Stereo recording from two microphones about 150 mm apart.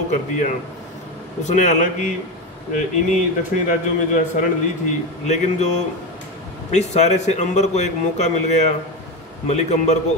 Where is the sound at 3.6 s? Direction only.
60° left (ahead or behind).